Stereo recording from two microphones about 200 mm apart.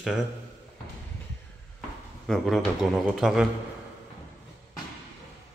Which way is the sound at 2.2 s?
Centre (ahead or behind).